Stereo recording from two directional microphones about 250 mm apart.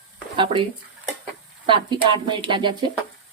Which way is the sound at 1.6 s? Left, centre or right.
Centre.